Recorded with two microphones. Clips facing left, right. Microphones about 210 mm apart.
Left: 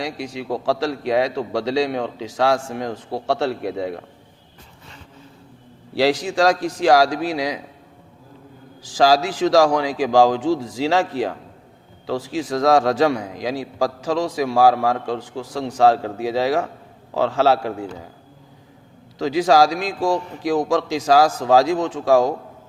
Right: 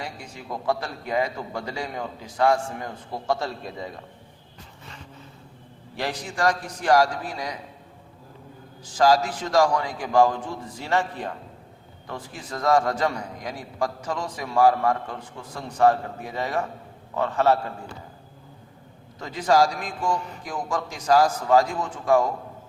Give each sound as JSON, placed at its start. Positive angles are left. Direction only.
{"t": 0.0, "sound": "a man's voice", "side_deg": 80}
{"t": 5.9, "sound": "a man's voice", "side_deg": 90}
{"t": 8.8, "sound": "a man's voice", "side_deg": 90}
{"t": 19.2, "sound": "a man's voice", "side_deg": 90}